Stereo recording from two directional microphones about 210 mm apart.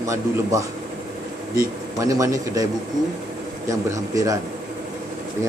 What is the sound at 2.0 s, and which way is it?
Speech, 15° right (ahead or behind).